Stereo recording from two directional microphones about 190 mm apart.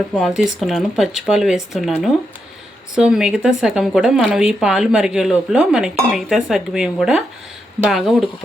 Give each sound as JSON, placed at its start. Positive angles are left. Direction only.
{"t": 0.1, "sound": "a woman's voice", "side_deg": 0}